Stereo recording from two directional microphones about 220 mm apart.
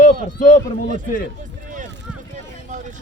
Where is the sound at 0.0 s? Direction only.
35° left (ahead or behind).